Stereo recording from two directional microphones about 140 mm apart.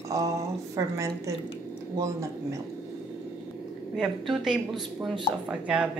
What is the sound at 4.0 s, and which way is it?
A woman's voice, 5° right (ahead or behind).